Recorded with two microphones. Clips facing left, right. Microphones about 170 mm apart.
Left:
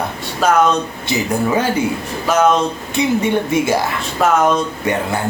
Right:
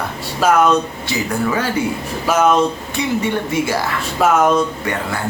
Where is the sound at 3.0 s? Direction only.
20° left (ahead or behind).